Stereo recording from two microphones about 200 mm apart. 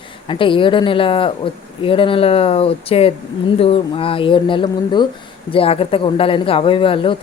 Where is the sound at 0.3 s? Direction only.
25° left (ahead or behind).